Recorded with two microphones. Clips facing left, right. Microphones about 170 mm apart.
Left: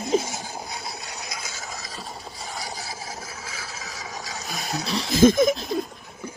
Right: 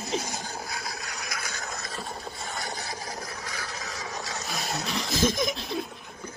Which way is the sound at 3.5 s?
5° left (ahead or behind).